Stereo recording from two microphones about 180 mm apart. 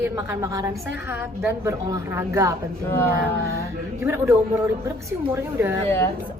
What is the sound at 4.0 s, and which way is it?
A woman's voice, 15° right (ahead or behind).